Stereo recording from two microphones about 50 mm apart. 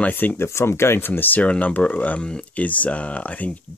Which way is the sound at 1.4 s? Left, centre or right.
Left.